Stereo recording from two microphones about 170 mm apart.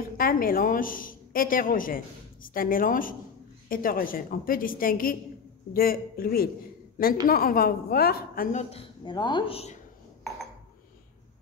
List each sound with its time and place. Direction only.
0.2 s a woman's voice: 60° left (ahead or behind)
8.5 s a woman's voice: 40° left (ahead or behind)